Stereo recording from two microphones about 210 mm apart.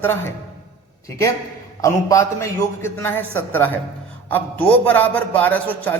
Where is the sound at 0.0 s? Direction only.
10° left (ahead or behind).